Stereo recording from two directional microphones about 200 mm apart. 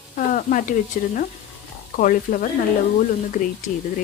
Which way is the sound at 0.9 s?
40° left (ahead or behind).